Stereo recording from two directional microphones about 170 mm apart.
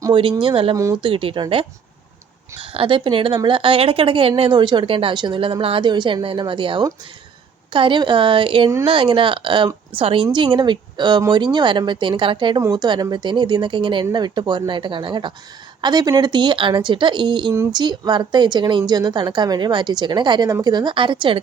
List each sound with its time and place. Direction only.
0.0 s a woman's voice: 30° right (ahead or behind)